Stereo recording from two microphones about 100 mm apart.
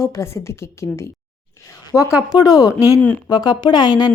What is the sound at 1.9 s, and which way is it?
A woman's voice, 30° left (ahead or behind).